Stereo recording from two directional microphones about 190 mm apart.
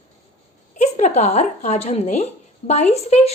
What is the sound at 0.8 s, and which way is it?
A woman's voice, 35° left (ahead or behind).